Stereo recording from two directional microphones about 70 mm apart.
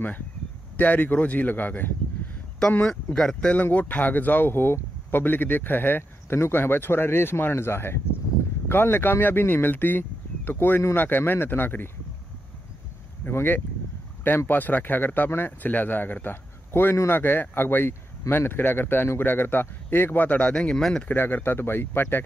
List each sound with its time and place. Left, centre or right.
0.7 s speech: left
3.3 s speech: left
13.2 s speech: left
16.9 s speech: left
17.2 s speech: left; by 21.0 s centre
21.1 s speech: left